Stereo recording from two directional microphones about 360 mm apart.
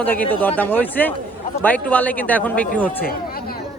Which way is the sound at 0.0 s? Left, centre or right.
Centre.